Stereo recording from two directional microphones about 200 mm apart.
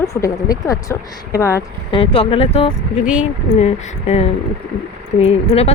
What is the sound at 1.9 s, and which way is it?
Speech, 30° left (ahead or behind).